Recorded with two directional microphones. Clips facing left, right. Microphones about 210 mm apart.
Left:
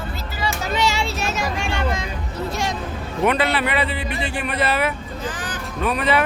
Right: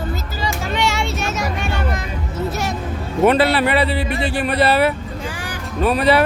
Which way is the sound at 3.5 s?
35° right (ahead or behind).